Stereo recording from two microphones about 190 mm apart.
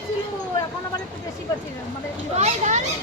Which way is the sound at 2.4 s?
35° right (ahead or behind).